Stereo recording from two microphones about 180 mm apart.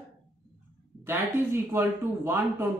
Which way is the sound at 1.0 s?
15° right (ahead or behind).